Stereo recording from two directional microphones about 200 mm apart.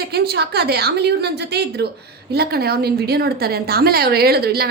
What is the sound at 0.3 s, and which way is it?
A woman's voice, 55° right (ahead or behind).